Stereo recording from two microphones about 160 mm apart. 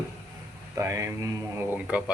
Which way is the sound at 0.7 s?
20° right (ahead or behind).